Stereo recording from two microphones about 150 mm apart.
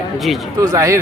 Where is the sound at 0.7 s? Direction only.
20° right (ahead or behind).